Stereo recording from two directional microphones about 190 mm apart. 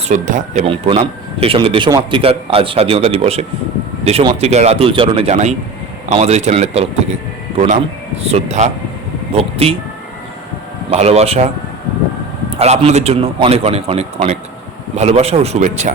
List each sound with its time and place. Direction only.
0.1 s speech: 45° right (ahead or behind)
0.7 s a man's voice: 30° right (ahead or behind)
8.2 s a man's voice: 35° right (ahead or behind)
10.9 s a man's voice: 35° right (ahead or behind)
12.5 s a man's voice: 35° right (ahead or behind)